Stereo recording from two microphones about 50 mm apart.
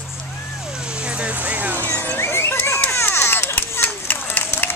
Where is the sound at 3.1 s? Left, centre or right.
Left.